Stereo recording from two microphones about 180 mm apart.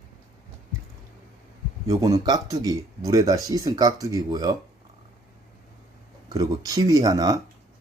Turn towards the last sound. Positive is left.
turn(degrees=-20)  # may be behind; listen again after turning